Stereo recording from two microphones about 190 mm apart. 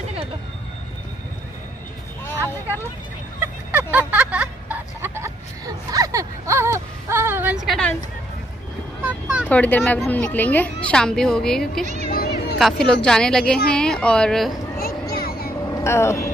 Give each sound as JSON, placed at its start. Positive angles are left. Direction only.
{"t": 4.1, "sound": "a sound", "side_deg": -5}
{"t": 5.9, "sound": "whimper", "side_deg": -20}
{"t": 9.0, "sound": "vehicle", "side_deg": -5}
{"t": 9.5, "sound": "a woman's voice", "side_deg": 10}
{"t": 11.8, "sound": "speech", "side_deg": -40}
{"t": 12.1, "sound": "a sound", "side_deg": 55}
{"t": 12.5, "sound": "a woman's voice", "side_deg": 0}
{"t": 14.8, "sound": "a sound", "side_deg": 50}
{"t": 15.7, "sound": "speech", "side_deg": 15}